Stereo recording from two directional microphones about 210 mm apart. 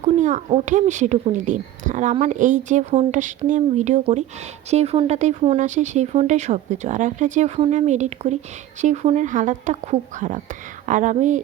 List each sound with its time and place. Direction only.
0.0 s speech: 35° right (ahead or behind)